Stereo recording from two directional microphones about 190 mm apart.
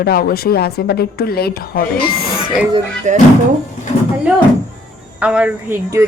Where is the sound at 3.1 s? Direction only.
40° right (ahead or behind).